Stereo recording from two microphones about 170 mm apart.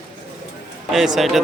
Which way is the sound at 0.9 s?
Centre (ahead or behind).